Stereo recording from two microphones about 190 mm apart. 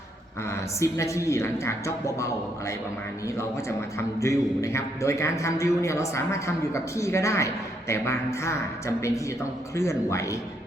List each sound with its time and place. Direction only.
0.5 s a man's voice: 15° left (ahead or behind)